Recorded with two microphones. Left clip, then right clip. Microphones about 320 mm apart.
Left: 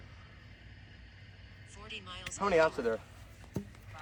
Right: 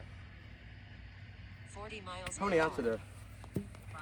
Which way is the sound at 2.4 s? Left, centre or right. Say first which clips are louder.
Left 4 dB; centre.